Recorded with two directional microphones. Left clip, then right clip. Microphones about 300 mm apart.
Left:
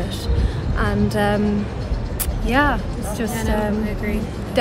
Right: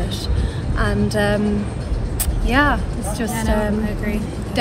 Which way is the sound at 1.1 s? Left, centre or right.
Centre.